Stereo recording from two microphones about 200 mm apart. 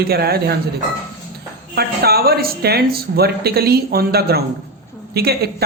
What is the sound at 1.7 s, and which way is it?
Speech, 50° right (ahead or behind).